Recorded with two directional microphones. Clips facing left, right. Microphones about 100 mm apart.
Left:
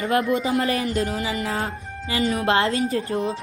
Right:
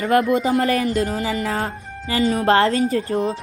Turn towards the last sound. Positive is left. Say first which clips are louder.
# right 3 dB
turn(degrees=-40)  # may be behind; listen again after turning